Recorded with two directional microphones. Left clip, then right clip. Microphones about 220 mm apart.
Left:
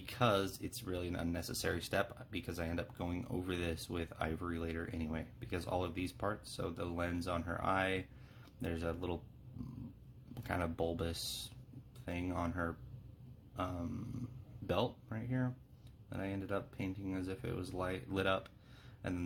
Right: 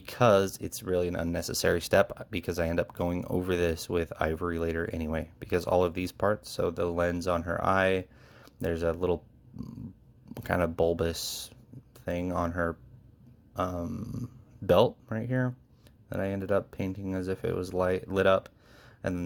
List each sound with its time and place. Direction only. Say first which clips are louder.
0.0 s speech: right 11 dB; 45° right (ahead or behind)
10.3 s speech: right 11 dB; 45° right (ahead or behind)